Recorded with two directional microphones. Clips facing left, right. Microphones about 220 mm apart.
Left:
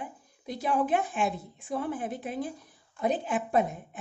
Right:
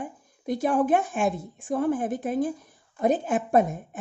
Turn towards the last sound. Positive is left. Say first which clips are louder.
# right 5 dB
turn(degrees=-45)  # may be behind; listen again after turning